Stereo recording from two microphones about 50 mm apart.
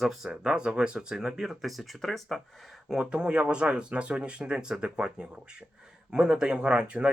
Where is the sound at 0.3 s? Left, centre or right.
Centre.